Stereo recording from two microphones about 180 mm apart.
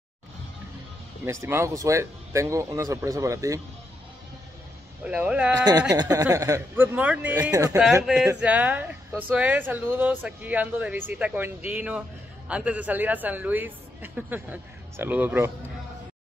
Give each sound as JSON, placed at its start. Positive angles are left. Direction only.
{"t": 1.2, "sound": "a man's voice", "side_deg": -15}
{"t": 5.0, "sound": "a man's voice", "side_deg": -5}
{"t": 5.6, "sound": "speech", "side_deg": -20}
{"t": 7.5, "sound": "speech", "side_deg": -20}
{"t": 8.0, "sound": "a man's voice", "side_deg": -5}